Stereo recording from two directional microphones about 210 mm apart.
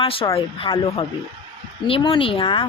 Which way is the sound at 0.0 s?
25° left (ahead or behind).